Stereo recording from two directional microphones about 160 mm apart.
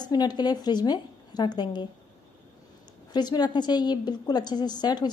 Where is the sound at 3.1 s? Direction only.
25° left (ahead or behind).